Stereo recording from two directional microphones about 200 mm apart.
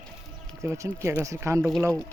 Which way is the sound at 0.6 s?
15° right (ahead or behind).